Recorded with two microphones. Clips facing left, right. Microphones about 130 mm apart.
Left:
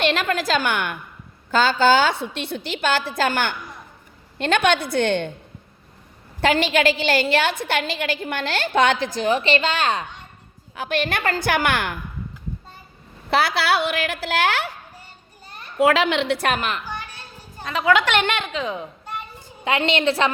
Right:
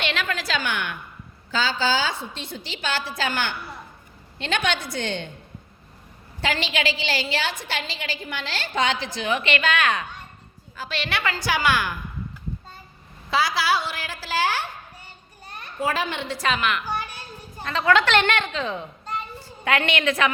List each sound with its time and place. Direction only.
0.0 s a woman's voice: 45° left (ahead or behind)
6.4 s a woman's voice: 50° left (ahead or behind); by 10.1 s 30° left (ahead or behind)
10.8 s a woman's voice: 50° left (ahead or behind)
13.3 s a woman's voice: 65° left (ahead or behind)
15.8 s a woman's voice: 75° left (ahead or behind)
16.6 s a child's voice: 40° left (ahead or behind)
17.6 s a woman's voice: 10° left (ahead or behind)
19.6 s a woman's voice: 25° left (ahead or behind)